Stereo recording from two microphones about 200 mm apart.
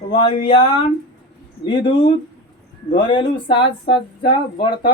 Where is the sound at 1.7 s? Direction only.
25° left (ahead or behind).